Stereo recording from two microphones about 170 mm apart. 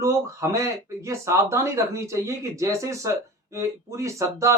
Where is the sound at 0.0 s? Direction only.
15° right (ahead or behind).